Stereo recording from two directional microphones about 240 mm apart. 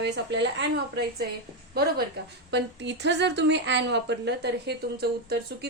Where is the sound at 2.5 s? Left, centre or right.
Right.